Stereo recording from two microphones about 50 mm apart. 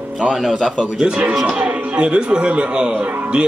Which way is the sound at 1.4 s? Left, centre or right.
Right.